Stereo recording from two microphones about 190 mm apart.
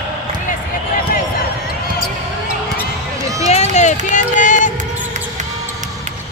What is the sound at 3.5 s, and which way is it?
Run, 35° left (ahead or behind).